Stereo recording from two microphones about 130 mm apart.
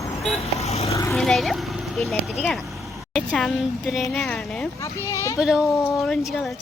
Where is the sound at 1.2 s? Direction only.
Centre (ahead or behind).